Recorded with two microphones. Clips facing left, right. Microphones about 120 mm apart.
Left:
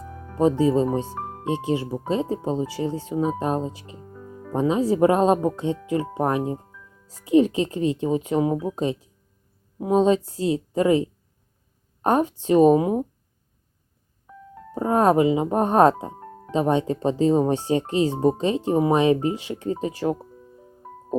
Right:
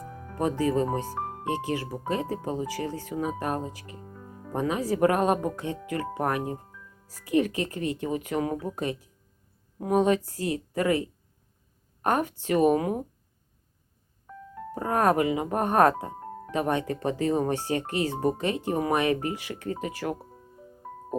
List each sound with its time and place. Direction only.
0.3 s speech: 20° left (ahead or behind)
14.3 s music: 5° left (ahead or behind)
14.8 s speech: 20° left (ahead or behind)